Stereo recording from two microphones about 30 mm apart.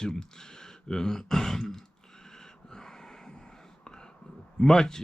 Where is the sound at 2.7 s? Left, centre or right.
Left.